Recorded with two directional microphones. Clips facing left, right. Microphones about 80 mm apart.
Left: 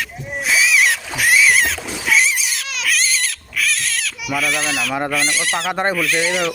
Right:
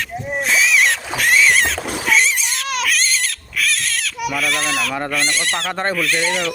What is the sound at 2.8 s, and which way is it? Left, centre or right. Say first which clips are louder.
Pig: left 4 dB; centre.